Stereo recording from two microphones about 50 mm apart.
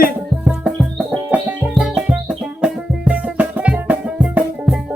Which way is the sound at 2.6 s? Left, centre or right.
Right.